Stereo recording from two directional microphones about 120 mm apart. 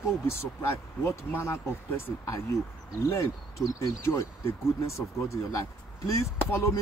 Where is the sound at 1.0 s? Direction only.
20° left (ahead or behind).